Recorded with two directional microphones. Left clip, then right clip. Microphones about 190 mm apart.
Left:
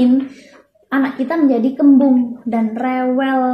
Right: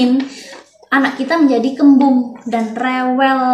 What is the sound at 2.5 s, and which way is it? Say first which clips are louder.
Speech: right 3 dB; 20° left (ahead or behind).